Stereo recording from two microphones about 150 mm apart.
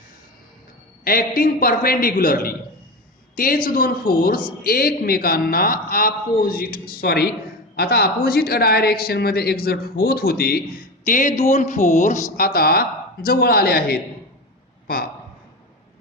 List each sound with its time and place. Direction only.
1.0 s a man's voice: 80° left
11.0 s speech: 60° left (ahead or behind); by 14.0 s 90° left